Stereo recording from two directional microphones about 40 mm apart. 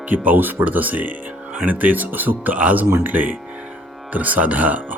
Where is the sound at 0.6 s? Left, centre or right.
Right.